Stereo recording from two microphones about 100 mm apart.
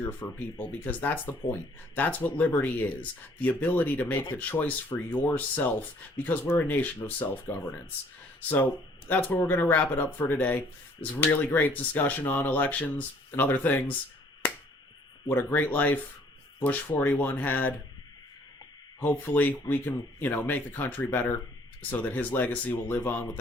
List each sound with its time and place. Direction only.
0.0 s speech: 20° left (ahead or behind)
15.3 s speech: 20° left (ahead or behind)
19.1 s speech: 20° left (ahead or behind)